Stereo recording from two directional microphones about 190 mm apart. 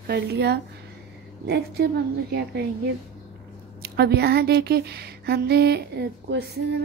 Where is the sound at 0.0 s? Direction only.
55° right (ahead or behind).